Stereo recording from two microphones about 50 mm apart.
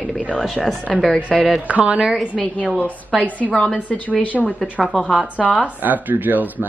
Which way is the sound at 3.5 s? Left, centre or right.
Centre.